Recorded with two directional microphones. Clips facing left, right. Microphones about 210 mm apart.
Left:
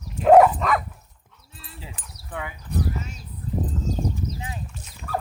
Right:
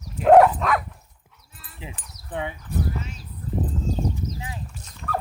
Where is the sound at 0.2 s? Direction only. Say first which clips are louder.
Even; centre (ahead or behind).